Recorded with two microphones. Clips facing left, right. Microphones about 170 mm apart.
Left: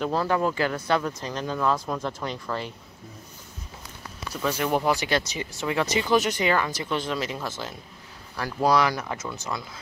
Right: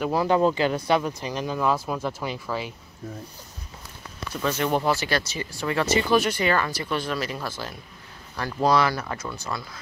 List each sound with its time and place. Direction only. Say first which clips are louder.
0.0 s speech: right 3 dB; 15° right (ahead or behind)
4.4 s speech: right 1 dB; 5° left (ahead or behind)
8.4 s speech: right 1 dB; 10° left (ahead or behind)